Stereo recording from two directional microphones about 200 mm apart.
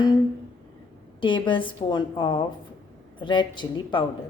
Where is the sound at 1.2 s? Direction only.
25° left (ahead or behind).